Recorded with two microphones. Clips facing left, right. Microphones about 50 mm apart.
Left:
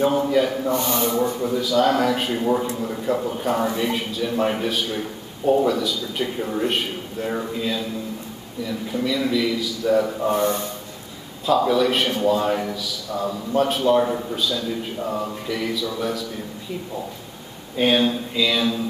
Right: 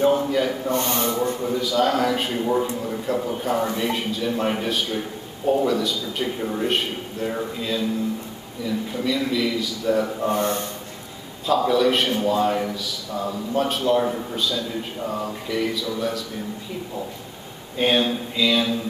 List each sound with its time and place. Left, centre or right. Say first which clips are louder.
0.0 s speech: left 1 dB; centre
0.7 s speech: left 1 dB; right
1.4 s speech: left 2 dB; centre
9.0 s speech: left 2 dB; centre
10.4 s a man's voice: left 2 dB; right
11.4 s speech: left 1 dB; centre
15.7 s speech: left 1 dB; centre
17.7 s speech: left 1 dB; centre